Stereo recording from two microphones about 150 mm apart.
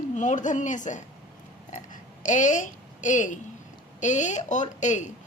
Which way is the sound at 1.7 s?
55° left (ahead or behind).